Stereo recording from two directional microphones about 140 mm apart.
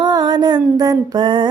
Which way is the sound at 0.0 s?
30° right (ahead or behind).